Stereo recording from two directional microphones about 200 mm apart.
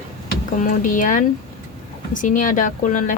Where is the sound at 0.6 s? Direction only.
40° left (ahead or behind).